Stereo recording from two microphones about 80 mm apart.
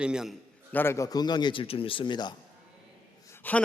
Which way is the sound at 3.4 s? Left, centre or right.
Left.